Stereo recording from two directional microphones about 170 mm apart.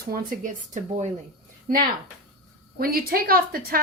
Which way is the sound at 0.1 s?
45° right (ahead or behind).